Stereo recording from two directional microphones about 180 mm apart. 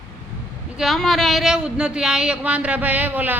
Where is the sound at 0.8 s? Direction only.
Centre (ahead or behind).